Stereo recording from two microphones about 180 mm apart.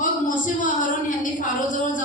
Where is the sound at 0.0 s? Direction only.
45° left (ahead or behind).